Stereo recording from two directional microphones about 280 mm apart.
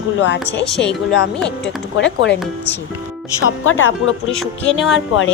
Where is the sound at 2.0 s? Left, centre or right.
Left.